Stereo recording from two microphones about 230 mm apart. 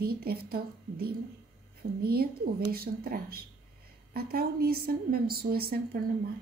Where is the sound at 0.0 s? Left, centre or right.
Right.